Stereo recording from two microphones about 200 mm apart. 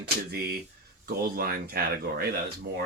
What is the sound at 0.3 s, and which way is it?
Speech, 50° right (ahead or behind).